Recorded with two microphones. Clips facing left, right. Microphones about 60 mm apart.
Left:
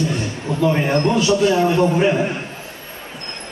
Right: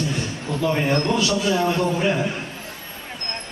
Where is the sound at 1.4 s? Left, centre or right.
Left.